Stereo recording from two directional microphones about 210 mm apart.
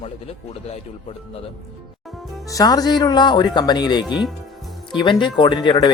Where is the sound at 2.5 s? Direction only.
15° left (ahead or behind).